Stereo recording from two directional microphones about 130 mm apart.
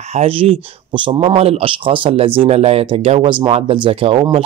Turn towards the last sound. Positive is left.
turn(degrees=-45)  # may be behind; listen again after turning